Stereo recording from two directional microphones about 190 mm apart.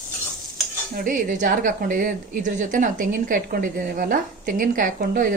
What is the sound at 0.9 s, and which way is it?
A woman's voice, 45° right (ahead or behind).